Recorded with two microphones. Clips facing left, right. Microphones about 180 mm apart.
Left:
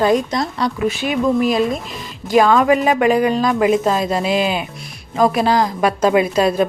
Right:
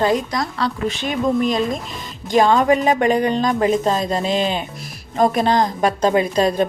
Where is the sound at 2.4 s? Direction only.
35° right (ahead or behind).